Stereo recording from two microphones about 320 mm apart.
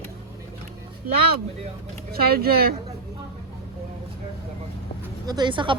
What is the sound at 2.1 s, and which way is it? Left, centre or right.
Speech, right.